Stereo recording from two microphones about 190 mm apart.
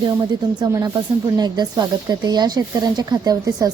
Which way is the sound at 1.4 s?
20° right (ahead or behind).